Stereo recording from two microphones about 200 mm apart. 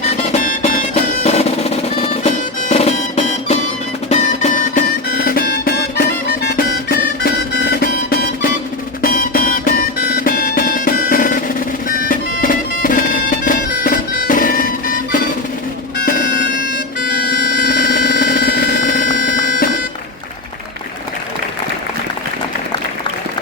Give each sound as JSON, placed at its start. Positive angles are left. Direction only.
{"t": 0.2, "sound": "music", "side_deg": 35}
{"t": 1.2, "sound": "drum", "side_deg": 30}
{"t": 4.1, "sound": "music", "side_deg": 35}
{"t": 11.9, "sound": "bagpipes", "side_deg": 45}
{"t": 16.0, "sound": "music", "side_deg": 50}
{"t": 17.2, "sound": "a sound", "side_deg": 50}